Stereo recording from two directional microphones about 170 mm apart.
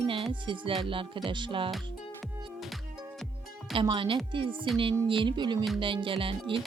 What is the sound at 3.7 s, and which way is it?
Speech, 30° right (ahead or behind).